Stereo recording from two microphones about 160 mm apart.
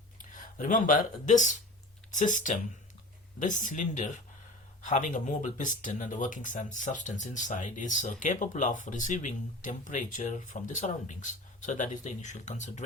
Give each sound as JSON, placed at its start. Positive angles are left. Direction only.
{"t": 0.2, "sound": "speech", "side_deg": 55}